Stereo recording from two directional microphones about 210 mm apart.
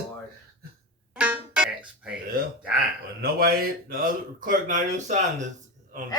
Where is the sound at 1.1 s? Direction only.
5° right (ahead or behind).